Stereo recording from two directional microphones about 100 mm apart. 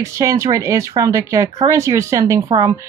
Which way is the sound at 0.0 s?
30° right (ahead or behind).